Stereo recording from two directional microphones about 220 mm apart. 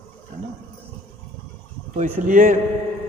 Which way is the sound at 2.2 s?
35° right (ahead or behind).